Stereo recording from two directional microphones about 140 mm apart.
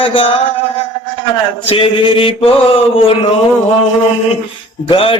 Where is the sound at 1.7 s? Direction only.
40° left (ahead or behind).